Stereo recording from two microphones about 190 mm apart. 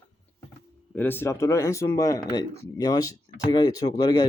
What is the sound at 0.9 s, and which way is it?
Speech, 10° left (ahead or behind).